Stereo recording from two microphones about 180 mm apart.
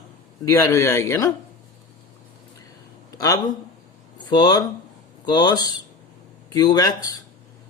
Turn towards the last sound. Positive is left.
turn(degrees=20)  # may be behind; listen again after turning